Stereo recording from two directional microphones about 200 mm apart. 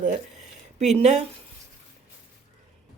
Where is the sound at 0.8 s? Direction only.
35° right (ahead or behind).